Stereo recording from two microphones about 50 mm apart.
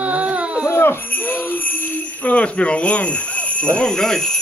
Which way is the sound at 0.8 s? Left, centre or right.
Left.